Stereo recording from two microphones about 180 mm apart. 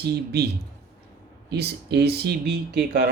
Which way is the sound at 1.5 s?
65° right (ahead or behind).